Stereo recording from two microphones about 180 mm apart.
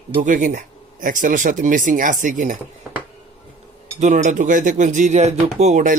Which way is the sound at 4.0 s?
40° right (ahead or behind).